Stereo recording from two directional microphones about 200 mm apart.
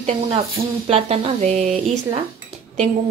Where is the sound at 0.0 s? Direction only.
30° right (ahead or behind).